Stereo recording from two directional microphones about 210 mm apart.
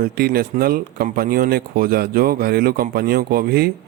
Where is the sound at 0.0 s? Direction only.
45° right (ahead or behind).